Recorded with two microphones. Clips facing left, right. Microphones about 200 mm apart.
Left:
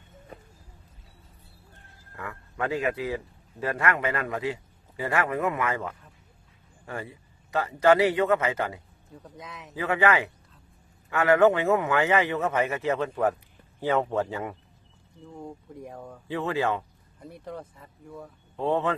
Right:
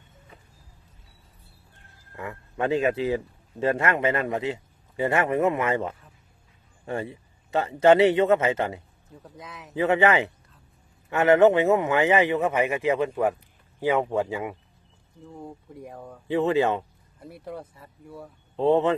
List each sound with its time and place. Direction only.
2.1 s a man's voice: 20° right (ahead or behind)
9.2 s speech: centre (ahead or behind)
9.8 s a man's voice: 20° right (ahead or behind); by 16.2 s centre (ahead or behind)
16.3 s a man's voice: 20° right (ahead or behind)
17.2 s a man's voice: 5° right (ahead or behind)
18.6 s a man's voice: 20° right (ahead or behind)